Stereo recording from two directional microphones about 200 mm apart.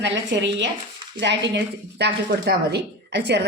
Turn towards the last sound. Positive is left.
turn(degrees=-60)  # may be behind; listen again after turning